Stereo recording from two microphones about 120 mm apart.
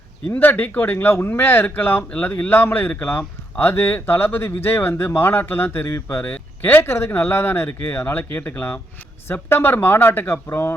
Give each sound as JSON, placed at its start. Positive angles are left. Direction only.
{"t": 0.3, "sound": "speech", "side_deg": 15}